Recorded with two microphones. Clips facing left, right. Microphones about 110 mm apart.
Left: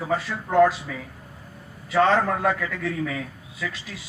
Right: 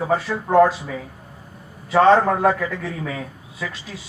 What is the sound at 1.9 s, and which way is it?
A man's voice, 30° right (ahead or behind).